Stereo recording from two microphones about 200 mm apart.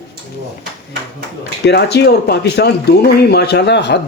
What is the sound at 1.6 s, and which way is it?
Speech, 55° left (ahead or behind).